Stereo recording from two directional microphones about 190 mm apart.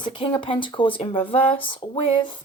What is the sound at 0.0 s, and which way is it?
Speech, 25° left (ahead or behind).